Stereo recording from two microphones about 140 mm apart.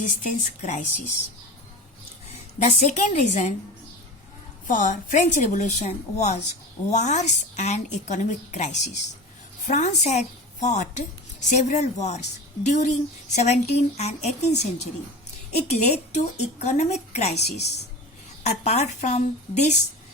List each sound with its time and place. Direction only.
0.0 s a woman's voice: 65° left (ahead or behind)
2.3 s a woman's voice: 60° left (ahead or behind)
4.6 s a woman's voice: 70° left (ahead or behind)